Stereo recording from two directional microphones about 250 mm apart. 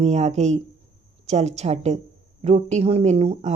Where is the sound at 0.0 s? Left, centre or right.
Right.